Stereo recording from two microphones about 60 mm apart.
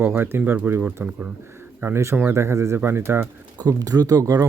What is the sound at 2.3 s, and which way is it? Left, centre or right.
Speech, right.